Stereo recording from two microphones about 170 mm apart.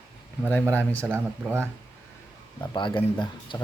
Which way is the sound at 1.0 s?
15° right (ahead or behind).